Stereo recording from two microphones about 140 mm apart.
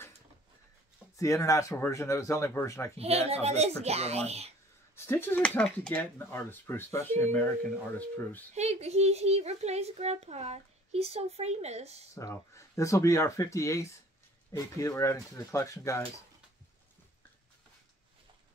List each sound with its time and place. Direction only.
1.1 s speech: 25° left (ahead or behind)
3.0 s a child's voice: 45° right (ahead or behind)
4.9 s speech: 15° left (ahead or behind)
8.5 s a child's voice: 50° right (ahead or behind)
12.2 s speech: 20° left (ahead or behind)